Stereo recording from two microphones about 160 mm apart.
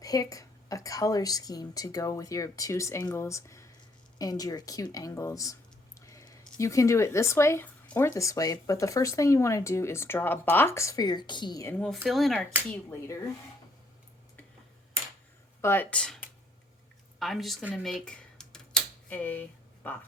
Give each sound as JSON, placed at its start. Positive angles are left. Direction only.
{"t": 0.0, "sound": "speech", "side_deg": 20}
{"t": 6.1, "sound": "a sound", "side_deg": 20}
{"t": 6.6, "sound": "speech", "side_deg": 20}
{"t": 12.0, "sound": "a woman's voice", "side_deg": 0}
{"t": 15.6, "sound": "a woman's voice", "side_deg": 10}
{"t": 18.0, "sound": "a sound", "side_deg": 5}